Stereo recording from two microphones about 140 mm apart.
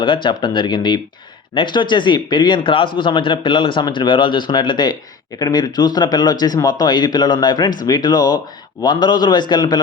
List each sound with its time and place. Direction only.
0.0 s speech: 35° left (ahead or behind)